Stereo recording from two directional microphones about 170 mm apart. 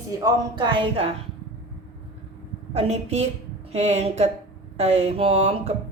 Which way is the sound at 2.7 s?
40° right (ahead or behind).